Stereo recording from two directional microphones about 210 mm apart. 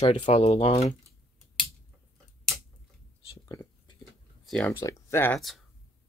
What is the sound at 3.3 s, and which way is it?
Whispering, 20° left (ahead or behind).